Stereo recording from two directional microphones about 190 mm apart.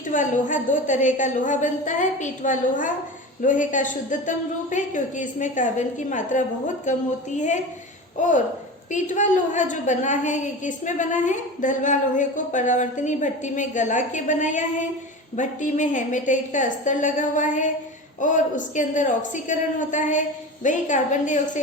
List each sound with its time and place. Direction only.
0.1 s a woman's voice: 40° left (ahead or behind)
8.9 s a woman's voice: 40° left (ahead or behind)